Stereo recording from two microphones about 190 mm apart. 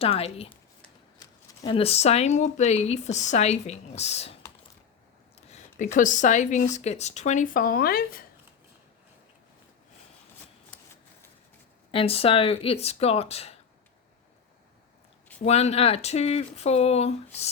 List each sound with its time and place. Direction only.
0.0 s speech: 30° left (ahead or behind)
5.5 s speech: 35° left (ahead or behind)
11.9 s speech: 30° left (ahead or behind)
15.4 s speech: 35° left (ahead or behind)